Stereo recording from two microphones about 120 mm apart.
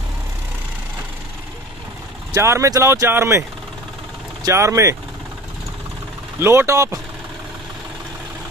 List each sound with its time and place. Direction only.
2.3 s speech: 25° right (ahead or behind)
6.4 s speech: 20° right (ahead or behind)